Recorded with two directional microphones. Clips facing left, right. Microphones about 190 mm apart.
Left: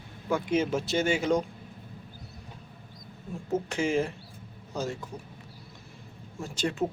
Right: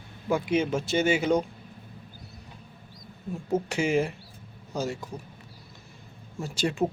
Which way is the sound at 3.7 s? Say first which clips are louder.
Right 1 dB; 10° right (ahead or behind).